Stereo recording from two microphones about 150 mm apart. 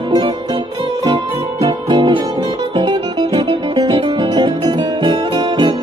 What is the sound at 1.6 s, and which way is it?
Music, 35° right (ahead or behind).